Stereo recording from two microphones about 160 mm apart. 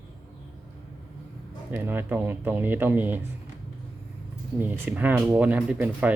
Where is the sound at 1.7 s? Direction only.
15° right (ahead or behind).